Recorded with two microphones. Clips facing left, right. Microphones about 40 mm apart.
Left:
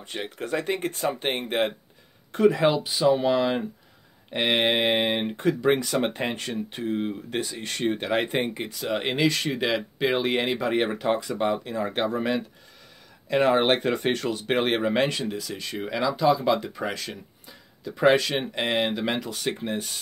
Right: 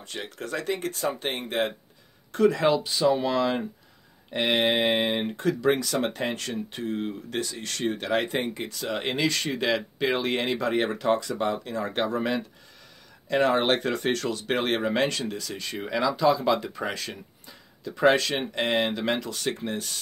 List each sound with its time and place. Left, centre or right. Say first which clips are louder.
0.0 s speech: left 3 dB; centre